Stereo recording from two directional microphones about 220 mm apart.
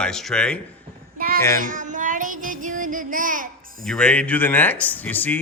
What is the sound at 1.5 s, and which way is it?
Child singing, 35° right (ahead or behind).